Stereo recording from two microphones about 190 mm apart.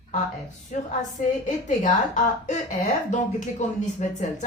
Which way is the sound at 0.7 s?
40° left (ahead or behind).